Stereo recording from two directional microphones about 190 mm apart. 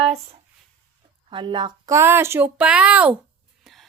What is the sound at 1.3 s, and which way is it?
Speech, 25° right (ahead or behind).